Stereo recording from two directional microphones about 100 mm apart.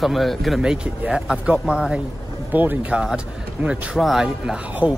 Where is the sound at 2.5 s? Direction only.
20° right (ahead or behind).